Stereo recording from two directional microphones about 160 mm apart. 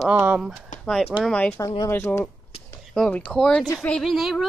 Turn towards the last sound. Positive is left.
turn(degrees=0)  # may be behind; listen again after turning